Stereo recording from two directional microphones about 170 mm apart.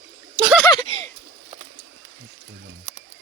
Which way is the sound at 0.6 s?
25° left (ahead or behind).